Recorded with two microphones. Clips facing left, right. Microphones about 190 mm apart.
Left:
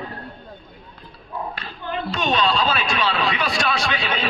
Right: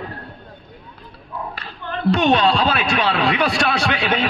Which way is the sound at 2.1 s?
60° right (ahead or behind).